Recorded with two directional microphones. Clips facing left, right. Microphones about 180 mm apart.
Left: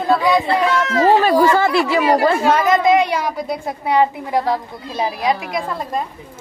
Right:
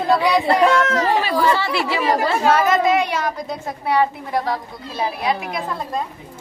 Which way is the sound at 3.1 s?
5° left (ahead or behind).